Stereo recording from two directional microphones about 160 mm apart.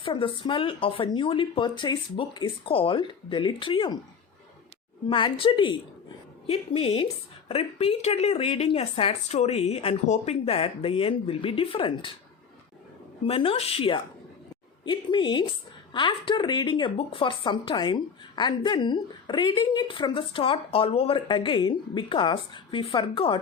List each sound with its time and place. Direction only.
0.0 s a woman's voice: 30° left (ahead or behind)
5.0 s a woman's voice: 30° left (ahead or behind)
13.2 s a woman's voice: 35° left (ahead or behind)